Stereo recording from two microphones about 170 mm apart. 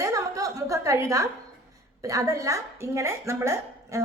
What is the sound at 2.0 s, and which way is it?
A woman's voice, 20° right (ahead or behind).